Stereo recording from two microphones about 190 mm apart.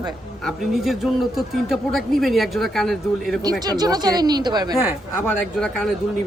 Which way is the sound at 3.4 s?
20° right (ahead or behind).